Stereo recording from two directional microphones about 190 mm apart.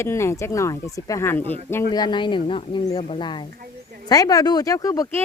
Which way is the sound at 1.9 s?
25° left (ahead or behind).